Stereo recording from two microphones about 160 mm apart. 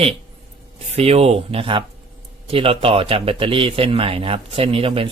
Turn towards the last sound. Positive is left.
turn(degrees=-35)  # may be behind; listen again after turning